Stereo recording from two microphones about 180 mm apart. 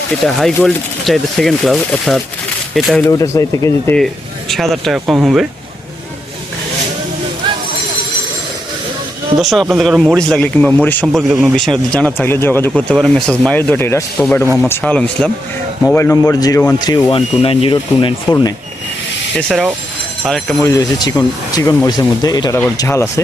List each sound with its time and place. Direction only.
0.3 s speech: centre (ahead or behind)
3.0 s speech: 20° left (ahead or behind)
3.9 s speech: centre (ahead or behind)
9.4 s speech: centre (ahead or behind)
12.9 s speech: centre (ahead or behind); by 18.5 s 25° left (ahead or behind)
19.3 s speech: 5° left (ahead or behind)
20.7 s speech: 20° left (ahead or behind)